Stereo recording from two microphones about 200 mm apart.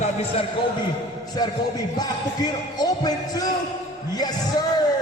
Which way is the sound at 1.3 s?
20° left (ahead or behind).